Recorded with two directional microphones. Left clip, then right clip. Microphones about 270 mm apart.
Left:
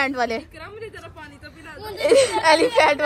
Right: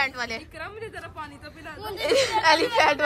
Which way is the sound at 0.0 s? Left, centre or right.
Centre.